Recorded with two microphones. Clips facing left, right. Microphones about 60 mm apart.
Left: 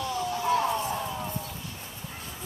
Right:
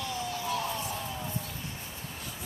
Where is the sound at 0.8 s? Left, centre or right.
Left.